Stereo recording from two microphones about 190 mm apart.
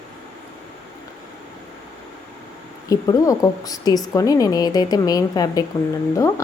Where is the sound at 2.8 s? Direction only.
20° left (ahead or behind).